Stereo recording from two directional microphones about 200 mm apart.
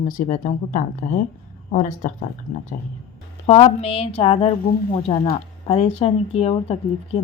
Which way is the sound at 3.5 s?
30° left (ahead or behind).